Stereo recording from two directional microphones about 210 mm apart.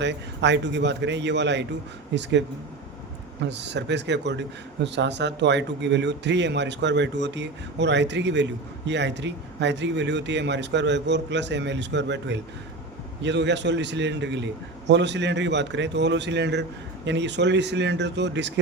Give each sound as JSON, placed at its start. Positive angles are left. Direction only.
{"t": 0.0, "sound": "speech", "side_deg": -55}
{"t": 3.4, "sound": "speech", "side_deg": -55}